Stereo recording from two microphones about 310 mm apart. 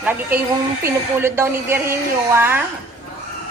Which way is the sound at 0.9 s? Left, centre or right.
Centre.